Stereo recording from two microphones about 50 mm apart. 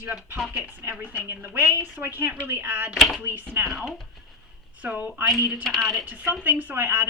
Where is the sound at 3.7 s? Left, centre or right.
Centre.